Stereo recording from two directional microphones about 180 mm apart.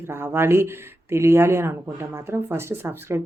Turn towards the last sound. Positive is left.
turn(degrees=-15)  # may be behind; listen again after turning